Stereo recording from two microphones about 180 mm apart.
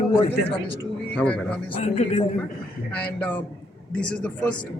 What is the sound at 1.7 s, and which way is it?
Speech, 40° left (ahead or behind).